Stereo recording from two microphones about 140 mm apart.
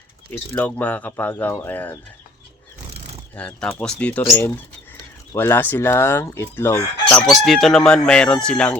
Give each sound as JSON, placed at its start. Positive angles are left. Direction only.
{"t": 0.5, "sound": "chicken", "side_deg": 10}
{"t": 3.3, "sound": "chicken", "side_deg": 10}
{"t": 7.3, "sound": "speech", "side_deg": 0}